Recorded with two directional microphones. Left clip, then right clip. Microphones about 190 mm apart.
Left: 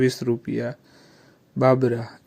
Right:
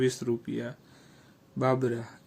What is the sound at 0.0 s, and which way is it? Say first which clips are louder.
Speech: left 6 dB; 25° left (ahead or behind).